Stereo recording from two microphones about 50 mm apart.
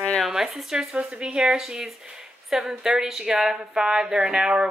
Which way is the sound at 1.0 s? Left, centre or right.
Right.